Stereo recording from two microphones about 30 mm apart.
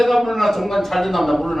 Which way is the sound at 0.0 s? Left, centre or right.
Centre.